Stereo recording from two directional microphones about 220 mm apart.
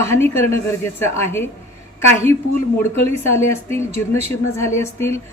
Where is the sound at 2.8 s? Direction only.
10° left (ahead or behind).